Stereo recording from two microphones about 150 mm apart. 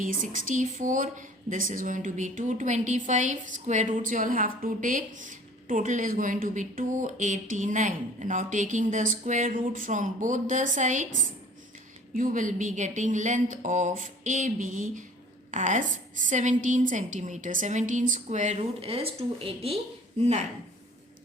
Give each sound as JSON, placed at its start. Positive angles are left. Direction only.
{"t": 0.0, "sound": "a woman's voice", "side_deg": -65}